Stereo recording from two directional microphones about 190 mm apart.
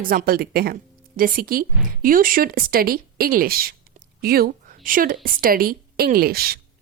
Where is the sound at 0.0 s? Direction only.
50° right (ahead or behind).